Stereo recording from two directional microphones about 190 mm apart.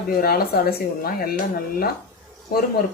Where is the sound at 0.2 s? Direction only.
50° left (ahead or behind).